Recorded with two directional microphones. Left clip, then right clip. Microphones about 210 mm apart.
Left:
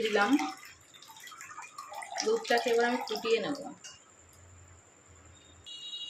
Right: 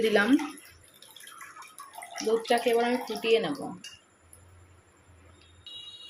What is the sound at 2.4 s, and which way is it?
Speech, 20° right (ahead or behind).